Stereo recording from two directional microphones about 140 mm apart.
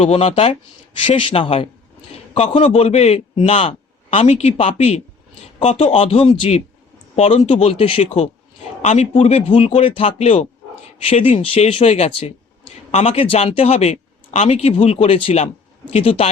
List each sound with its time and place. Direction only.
0.0 s speech: 50° left (ahead or behind)